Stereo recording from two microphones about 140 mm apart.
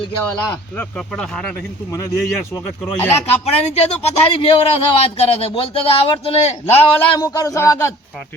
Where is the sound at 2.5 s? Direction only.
20° left (ahead or behind).